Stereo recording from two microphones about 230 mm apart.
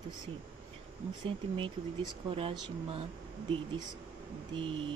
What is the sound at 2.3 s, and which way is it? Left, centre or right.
Speech, right.